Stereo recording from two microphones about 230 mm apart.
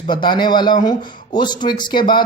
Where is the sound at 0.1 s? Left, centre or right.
Centre.